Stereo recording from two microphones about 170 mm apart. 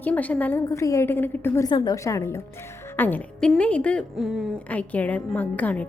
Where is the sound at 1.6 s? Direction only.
25° left (ahead or behind); by 4.5 s centre (ahead or behind).